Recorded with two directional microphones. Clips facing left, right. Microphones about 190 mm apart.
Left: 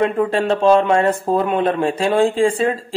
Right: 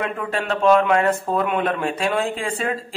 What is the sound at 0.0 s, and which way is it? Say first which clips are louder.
Speech: left 8 dB; 30° left (ahead or behind).